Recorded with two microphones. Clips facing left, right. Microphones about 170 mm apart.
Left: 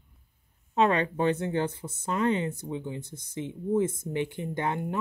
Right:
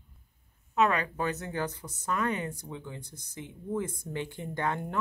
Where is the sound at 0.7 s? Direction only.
30° left (ahead or behind).